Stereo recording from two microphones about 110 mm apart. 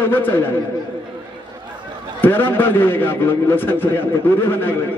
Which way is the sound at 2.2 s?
20° left (ahead or behind).